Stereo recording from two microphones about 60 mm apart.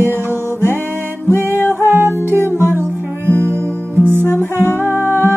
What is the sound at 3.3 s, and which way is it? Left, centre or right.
Music, left.